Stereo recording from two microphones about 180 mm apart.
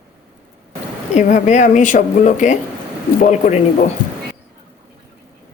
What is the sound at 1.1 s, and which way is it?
A woman's voice, 45° left (ahead or behind).